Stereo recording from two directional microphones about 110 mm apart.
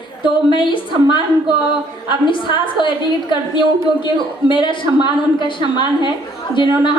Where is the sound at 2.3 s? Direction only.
50° left (ahead or behind).